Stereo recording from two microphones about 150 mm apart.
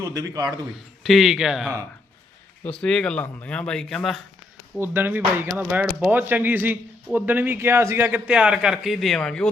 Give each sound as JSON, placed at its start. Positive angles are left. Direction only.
{"t": 0.0, "sound": "a man's voice", "side_deg": -25}
{"t": 1.0, "sound": "speech", "side_deg": 0}
{"t": 4.8, "sound": "speech", "side_deg": -15}